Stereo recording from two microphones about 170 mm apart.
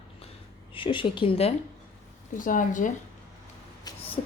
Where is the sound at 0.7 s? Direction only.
30° left (ahead or behind).